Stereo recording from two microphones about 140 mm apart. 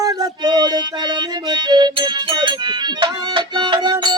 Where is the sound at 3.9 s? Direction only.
30° right (ahead or behind).